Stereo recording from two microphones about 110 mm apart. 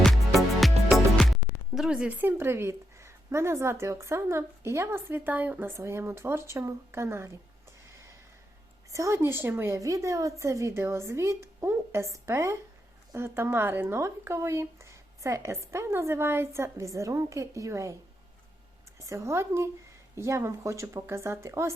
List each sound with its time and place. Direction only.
0.6 s music: centre (ahead or behind)
1.7 s a woman's voice: 5° right (ahead or behind); by 7.3 s 25° right (ahead or behind)
8.9 s a woman's voice: 30° right (ahead or behind)
18.9 s a woman's voice: 30° right (ahead or behind)